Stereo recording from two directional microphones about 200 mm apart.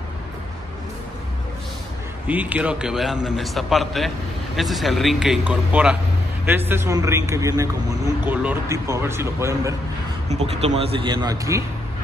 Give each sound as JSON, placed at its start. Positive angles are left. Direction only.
{"t": 2.2, "sound": "a man's voice", "side_deg": -5}
{"t": 10.2, "sound": "speech", "side_deg": -30}